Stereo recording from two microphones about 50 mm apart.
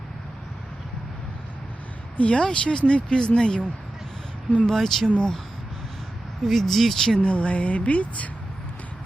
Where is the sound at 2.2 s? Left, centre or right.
Centre.